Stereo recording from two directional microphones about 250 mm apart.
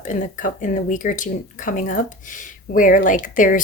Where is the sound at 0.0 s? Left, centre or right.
Left.